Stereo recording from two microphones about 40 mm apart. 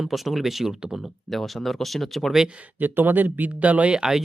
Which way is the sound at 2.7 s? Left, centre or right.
Right.